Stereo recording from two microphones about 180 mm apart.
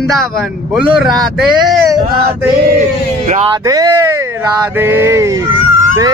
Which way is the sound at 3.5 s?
20° right (ahead or behind).